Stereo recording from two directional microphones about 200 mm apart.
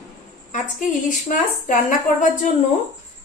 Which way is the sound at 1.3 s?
40° left (ahead or behind).